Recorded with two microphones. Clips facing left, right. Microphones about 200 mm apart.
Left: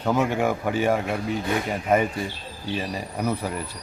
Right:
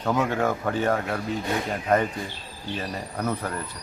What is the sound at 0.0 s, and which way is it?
A man's voice, 10° left (ahead or behind).